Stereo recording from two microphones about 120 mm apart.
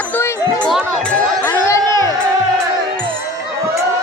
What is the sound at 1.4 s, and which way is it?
Music, 25° left (ahead or behind).